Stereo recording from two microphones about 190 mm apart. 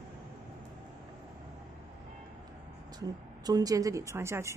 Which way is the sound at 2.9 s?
20° right (ahead or behind).